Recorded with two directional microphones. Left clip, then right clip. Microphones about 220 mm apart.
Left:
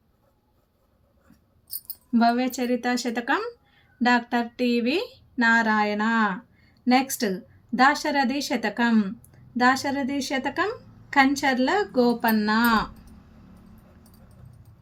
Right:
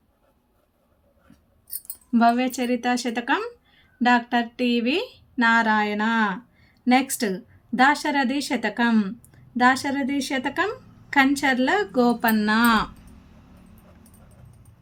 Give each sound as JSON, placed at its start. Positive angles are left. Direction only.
{"t": 2.1, "sound": "a woman's voice", "side_deg": -10}